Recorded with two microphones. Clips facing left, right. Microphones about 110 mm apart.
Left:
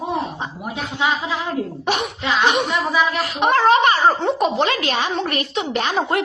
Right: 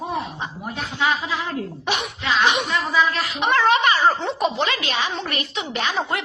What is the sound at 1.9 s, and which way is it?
Speech, 45° left (ahead or behind).